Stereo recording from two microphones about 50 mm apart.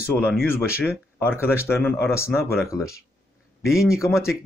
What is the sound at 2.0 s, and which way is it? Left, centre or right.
Speech, left.